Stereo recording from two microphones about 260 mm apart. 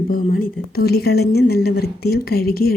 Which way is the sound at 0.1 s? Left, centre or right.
Left.